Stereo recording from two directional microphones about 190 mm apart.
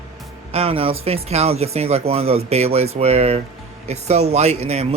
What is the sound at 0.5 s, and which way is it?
Speech, 30° right (ahead or behind).